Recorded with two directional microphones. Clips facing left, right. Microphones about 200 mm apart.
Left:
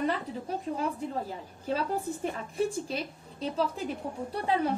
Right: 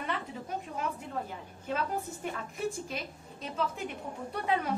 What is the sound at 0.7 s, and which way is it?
A woman's voice, 35° left (ahead or behind).